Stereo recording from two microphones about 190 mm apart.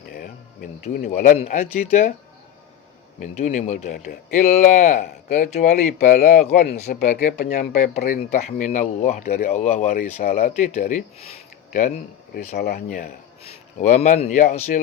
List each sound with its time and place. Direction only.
0.9 s speech: 40° left (ahead or behind)
3.2 s speech: 40° left (ahead or behind)
12.3 s speech: 55° left (ahead or behind)
13.4 s speech: 35° left (ahead or behind)